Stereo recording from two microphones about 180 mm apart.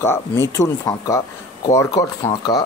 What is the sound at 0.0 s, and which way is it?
Speech, 15° left (ahead or behind).